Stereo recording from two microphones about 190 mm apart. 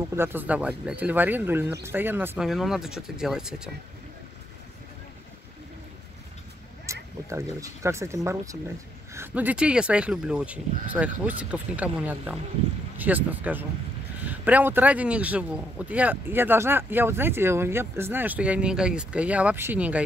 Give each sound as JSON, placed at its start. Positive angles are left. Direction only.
{"t": 0.1, "sound": "speech", "side_deg": -10}
{"t": 6.9, "sound": "speech", "side_deg": -15}